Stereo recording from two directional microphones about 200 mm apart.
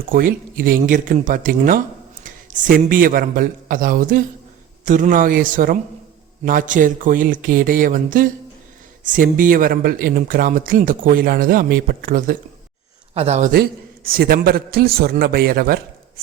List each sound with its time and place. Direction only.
0.1 s a man's voice: 45° right (ahead or behind)
13.1 s a man's voice: 35° right (ahead or behind)
13.5 s speech: 50° right (ahead or behind)